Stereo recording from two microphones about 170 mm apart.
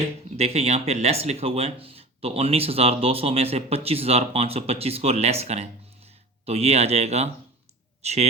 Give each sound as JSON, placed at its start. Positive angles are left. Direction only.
{"t": 0.3, "sound": "speech", "side_deg": -40}